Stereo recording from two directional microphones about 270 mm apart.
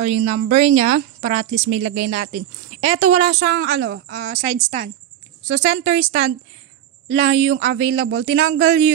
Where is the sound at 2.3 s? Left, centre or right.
Right.